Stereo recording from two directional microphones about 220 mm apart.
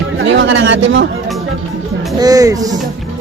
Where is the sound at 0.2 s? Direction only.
55° right (ahead or behind).